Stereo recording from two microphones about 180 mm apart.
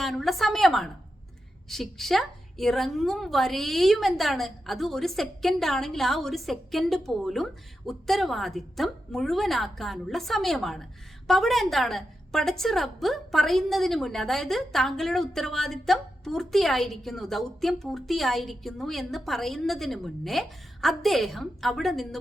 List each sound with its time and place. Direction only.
0.0 s a woman's voice: centre (ahead or behind)